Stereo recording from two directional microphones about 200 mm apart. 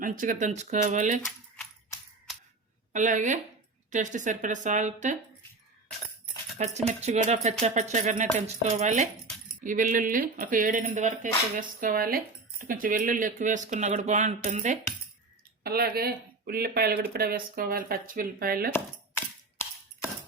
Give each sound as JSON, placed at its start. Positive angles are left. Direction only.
{"t": 0.0, "sound": "speech", "side_deg": -45}
{"t": 2.9, "sound": "speech", "side_deg": -40}
{"t": 6.8, "sound": "speech", "side_deg": -35}
{"t": 15.6, "sound": "speech", "side_deg": -50}